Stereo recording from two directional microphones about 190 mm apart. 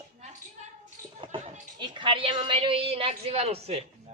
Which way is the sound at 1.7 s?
25° right (ahead or behind).